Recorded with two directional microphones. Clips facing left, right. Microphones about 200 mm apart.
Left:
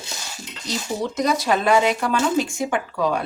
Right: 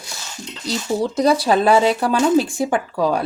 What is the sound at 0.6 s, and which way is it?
Speech, 35° right (ahead or behind).